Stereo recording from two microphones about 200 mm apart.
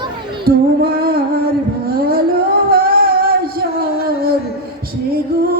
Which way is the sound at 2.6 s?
50° right (ahead or behind).